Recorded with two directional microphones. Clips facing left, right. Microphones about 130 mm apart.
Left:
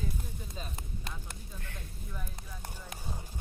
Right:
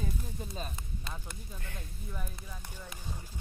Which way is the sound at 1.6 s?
5° right (ahead or behind).